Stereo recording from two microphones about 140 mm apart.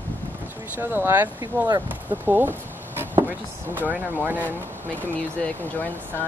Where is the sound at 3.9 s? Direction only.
15° right (ahead or behind).